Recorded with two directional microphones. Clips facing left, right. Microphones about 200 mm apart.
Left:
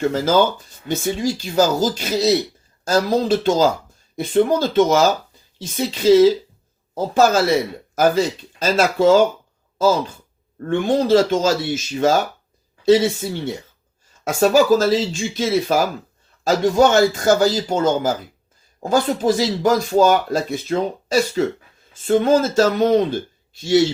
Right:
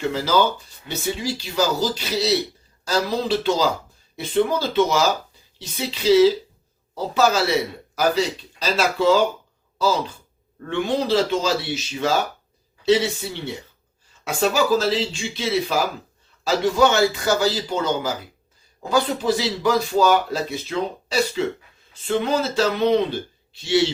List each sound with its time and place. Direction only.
0.0 s speech: 45° left (ahead or behind)
10.7 s speech: 45° left (ahead or behind)